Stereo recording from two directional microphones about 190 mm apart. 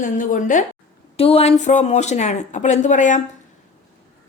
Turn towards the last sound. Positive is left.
turn(degrees=40)  # may be behind; listen again after turning